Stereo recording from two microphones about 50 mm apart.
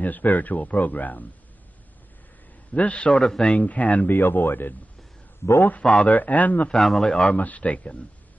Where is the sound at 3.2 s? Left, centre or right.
Centre.